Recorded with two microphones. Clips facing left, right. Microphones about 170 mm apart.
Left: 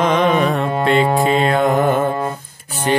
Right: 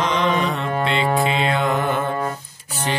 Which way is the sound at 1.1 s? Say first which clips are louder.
Left 5 dB; 45° left (ahead or behind).